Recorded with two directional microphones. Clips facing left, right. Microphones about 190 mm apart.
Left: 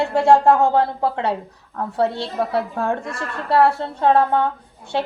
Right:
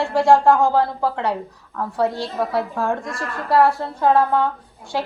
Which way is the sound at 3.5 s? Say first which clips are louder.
Even; 25° left (ahead or behind).